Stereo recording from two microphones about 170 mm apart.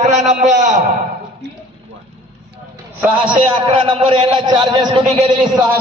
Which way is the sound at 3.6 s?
30° right (ahead or behind).